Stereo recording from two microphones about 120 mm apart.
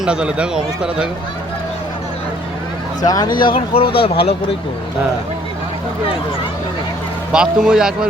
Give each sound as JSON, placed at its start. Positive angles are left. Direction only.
{"t": 0.0, "sound": "speech", "side_deg": -10}
{"t": 3.0, "sound": "speech", "side_deg": 35}
{"t": 7.3, "sound": "speech", "side_deg": -5}